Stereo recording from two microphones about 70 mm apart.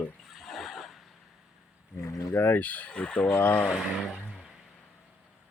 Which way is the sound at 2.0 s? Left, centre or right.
Left.